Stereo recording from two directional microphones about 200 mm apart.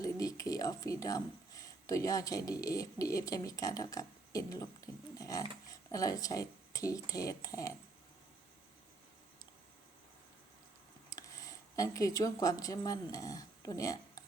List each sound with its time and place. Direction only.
0.0 s speech: 15° left (ahead or behind)
11.1 s speech: 15° left (ahead or behind)